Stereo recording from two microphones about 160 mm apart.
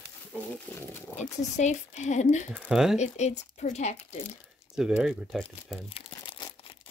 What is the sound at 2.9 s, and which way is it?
Speech, 45° left (ahead or behind).